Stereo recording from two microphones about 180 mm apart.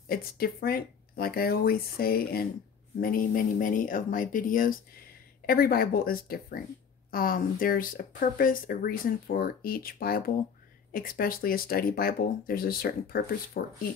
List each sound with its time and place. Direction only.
0.1 s speech: 55° left (ahead or behind)